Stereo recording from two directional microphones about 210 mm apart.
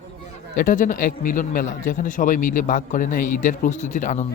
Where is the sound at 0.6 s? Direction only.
40° left (ahead or behind).